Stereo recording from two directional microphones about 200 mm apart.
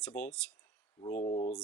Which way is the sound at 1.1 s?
30° left (ahead or behind).